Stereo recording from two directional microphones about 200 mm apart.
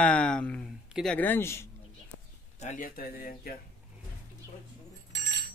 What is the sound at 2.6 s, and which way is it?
Speech, 40° left (ahead or behind).